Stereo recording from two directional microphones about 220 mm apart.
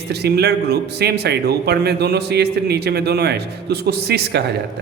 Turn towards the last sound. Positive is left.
turn(degrees=-50)  # may be behind; listen again after turning